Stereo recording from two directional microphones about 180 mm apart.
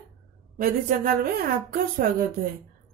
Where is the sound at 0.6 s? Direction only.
50° right (ahead or behind).